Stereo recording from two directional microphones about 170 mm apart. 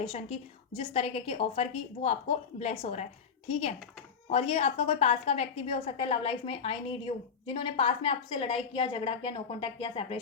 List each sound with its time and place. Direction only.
0.0 s a woman's voice: 35° left (ahead or behind)